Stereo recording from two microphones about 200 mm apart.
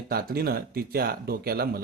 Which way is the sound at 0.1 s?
50° right (ahead or behind).